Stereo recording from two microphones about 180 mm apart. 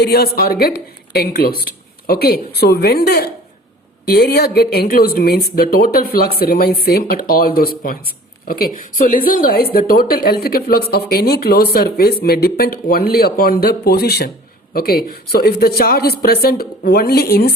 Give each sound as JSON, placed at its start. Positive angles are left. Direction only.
{"t": 0.0, "sound": "speech", "side_deg": 60}